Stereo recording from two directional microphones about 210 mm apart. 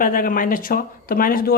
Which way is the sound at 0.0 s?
40° left (ahead or behind).